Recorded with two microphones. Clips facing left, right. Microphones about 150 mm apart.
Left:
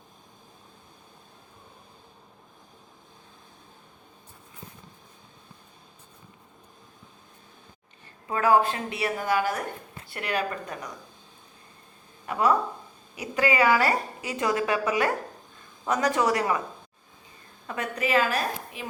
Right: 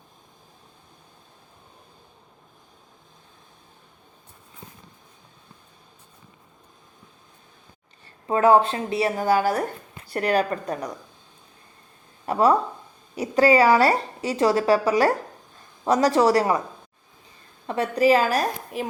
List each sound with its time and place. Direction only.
8.3 s a woman's voice: 25° right (ahead or behind)
12.2 s a woman's voice: 30° right (ahead or behind)
17.7 s a woman's voice: 35° right (ahead or behind)